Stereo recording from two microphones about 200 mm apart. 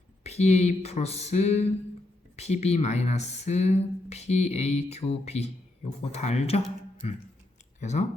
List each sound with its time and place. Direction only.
0.2 s speech: 35° left (ahead or behind)